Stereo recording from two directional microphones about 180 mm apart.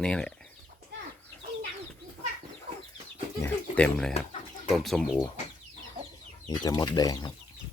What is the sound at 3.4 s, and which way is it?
Bird, 10° left (ahead or behind).